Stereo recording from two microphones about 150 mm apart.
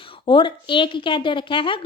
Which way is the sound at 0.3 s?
35° left (ahead or behind).